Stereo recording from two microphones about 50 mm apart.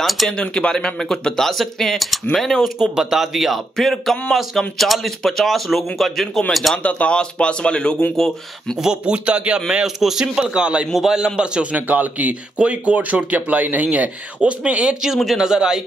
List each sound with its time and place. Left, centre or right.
0.4 s speech: centre
2.8 s speech: centre
6.8 s speech: left
7.2 s speech: centre
8.8 s speech: right
9.9 s speech: centre
10.9 s speech: centre
11.7 s speech: right; by 15.8 s centre